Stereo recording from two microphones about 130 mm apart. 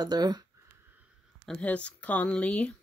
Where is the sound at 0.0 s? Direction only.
30° right (ahead or behind).